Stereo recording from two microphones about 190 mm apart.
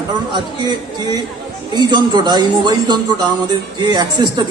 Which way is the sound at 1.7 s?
25° right (ahead or behind).